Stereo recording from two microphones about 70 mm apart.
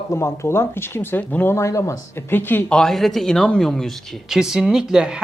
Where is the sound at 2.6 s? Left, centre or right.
Centre.